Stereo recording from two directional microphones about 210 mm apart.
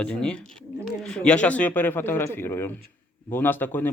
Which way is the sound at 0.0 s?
5° left (ahead or behind).